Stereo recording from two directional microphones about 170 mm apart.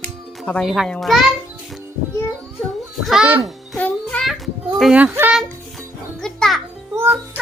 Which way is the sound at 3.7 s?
5° left (ahead or behind).